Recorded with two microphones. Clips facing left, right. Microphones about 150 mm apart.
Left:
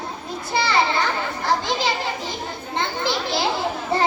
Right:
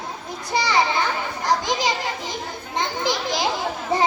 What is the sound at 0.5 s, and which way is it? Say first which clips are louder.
Children playing: even; 15° right (ahead or behind).